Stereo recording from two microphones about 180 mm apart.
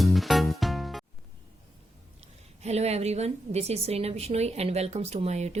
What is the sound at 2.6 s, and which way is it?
A woman's voice, 35° right (ahead or behind).